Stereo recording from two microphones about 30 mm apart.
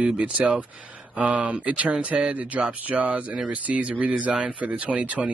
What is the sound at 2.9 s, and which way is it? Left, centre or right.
Speech, right.